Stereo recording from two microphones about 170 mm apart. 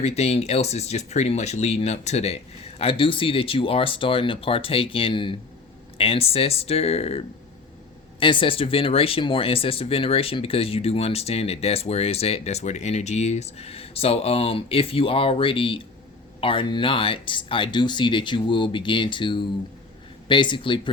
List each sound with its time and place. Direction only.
0.0 s speech: 40° left (ahead or behind)